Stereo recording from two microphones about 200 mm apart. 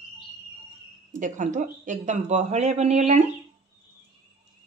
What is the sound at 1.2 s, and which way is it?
A woman's voice, 40° right (ahead or behind).